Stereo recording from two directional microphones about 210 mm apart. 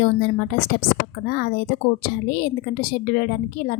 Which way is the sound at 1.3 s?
45° left (ahead or behind).